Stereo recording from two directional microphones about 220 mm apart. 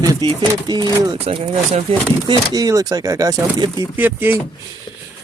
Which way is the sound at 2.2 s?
15° right (ahead or behind).